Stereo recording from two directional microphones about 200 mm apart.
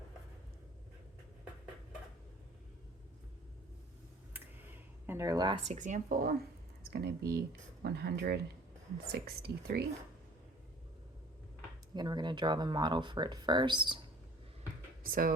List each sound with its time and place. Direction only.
4.4 s a sound: 10° right (ahead or behind)
5.6 s speech: 40° right (ahead or behind)
11.9 s speech: 20° right (ahead or behind)
15.0 s speech: 45° right (ahead or behind)